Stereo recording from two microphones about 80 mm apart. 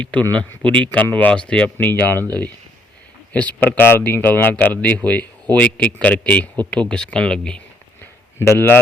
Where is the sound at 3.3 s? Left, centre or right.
Centre.